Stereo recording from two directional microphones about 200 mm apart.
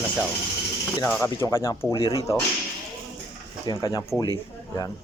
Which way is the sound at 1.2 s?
15° left (ahead or behind).